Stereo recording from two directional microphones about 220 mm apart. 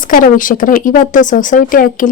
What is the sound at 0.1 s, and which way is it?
Speech, 40° left (ahead or behind).